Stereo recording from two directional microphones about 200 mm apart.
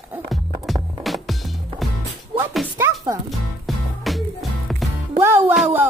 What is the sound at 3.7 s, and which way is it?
Music, centre (ahead or behind).